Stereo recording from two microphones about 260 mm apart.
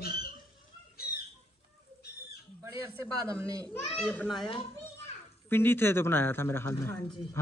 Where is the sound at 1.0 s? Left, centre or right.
Left.